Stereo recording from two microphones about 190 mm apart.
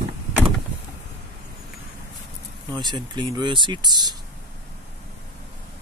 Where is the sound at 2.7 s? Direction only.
25° right (ahead or behind).